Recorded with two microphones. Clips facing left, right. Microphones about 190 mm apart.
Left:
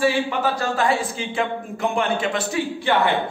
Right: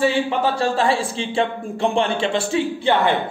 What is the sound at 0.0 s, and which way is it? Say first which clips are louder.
A man's voice: right 2 dB; 30° right (ahead or behind).